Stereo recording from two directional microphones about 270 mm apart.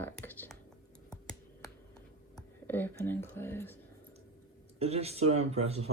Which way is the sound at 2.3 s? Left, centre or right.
Centre.